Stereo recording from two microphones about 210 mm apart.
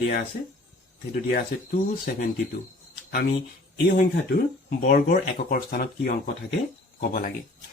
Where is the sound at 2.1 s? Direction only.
50° left (ahead or behind).